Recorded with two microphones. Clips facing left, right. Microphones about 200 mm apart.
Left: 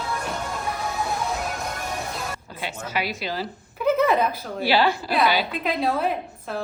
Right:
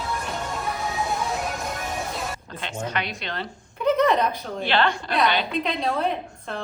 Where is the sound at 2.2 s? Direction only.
5° left (ahead or behind).